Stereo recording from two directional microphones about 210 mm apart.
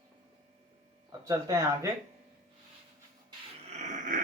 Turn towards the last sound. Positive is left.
turn(degrees=-35)  # may be behind; listen again after turning